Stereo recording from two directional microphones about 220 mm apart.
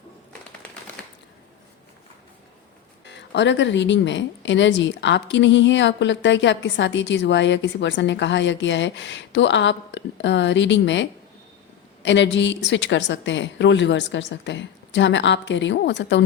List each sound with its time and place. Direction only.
3.1 s speech: 55° left (ahead or behind)